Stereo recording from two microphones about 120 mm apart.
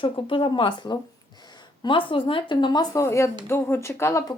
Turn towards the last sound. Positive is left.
turn(degrees=20)  # may be behind; listen again after turning